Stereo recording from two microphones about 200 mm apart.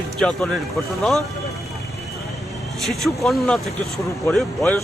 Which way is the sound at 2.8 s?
Centre (ahead or behind).